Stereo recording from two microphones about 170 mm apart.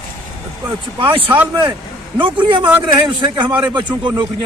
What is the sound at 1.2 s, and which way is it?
Speech, 10° right (ahead or behind).